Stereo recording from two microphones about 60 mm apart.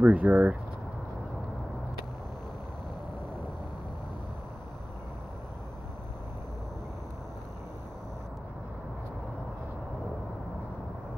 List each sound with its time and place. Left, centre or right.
0.0 s speech: right